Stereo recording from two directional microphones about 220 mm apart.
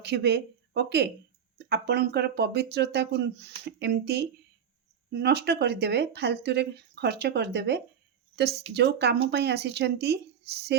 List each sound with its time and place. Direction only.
0.0 s speech: 50° right (ahead or behind)